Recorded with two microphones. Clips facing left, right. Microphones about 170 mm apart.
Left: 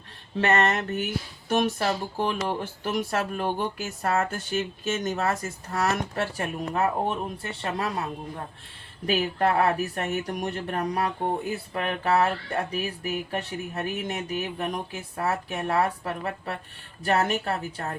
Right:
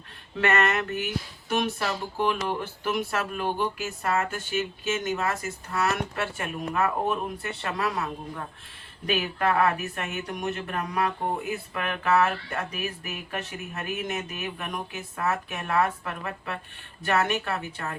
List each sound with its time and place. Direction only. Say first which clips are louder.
0.3 s speech: left 1 dB; 30° left (ahead or behind)